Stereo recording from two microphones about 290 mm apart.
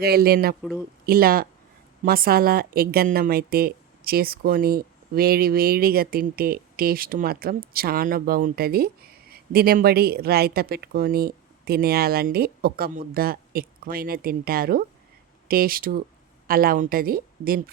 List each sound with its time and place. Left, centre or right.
0.0 s a woman's voice: right